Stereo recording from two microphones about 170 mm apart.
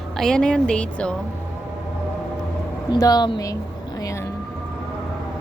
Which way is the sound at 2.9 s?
25° left (ahead or behind).